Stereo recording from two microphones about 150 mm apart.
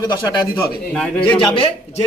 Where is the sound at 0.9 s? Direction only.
5° left (ahead or behind).